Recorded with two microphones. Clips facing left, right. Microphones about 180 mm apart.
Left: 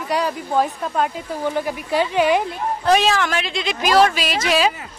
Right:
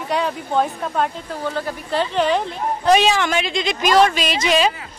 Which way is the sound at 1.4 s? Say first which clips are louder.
Left 2 dB; 15° left (ahead or behind).